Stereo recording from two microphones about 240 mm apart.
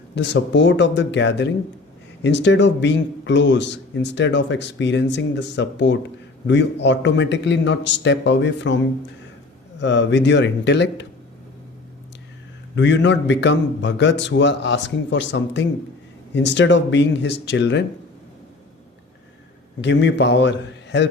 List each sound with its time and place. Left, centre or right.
0.2 s a man's voice: left
12.7 s a man's voice: left
19.8 s a man's voice: left